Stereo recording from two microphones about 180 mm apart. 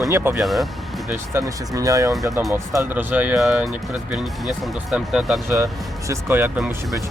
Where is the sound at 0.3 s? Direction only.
Centre (ahead or behind).